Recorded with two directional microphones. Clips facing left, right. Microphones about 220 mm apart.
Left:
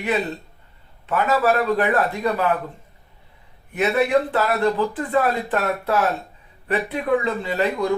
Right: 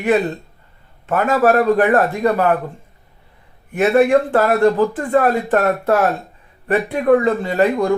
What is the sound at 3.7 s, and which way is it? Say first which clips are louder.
Speech: right 6 dB; 50° right (ahead or behind).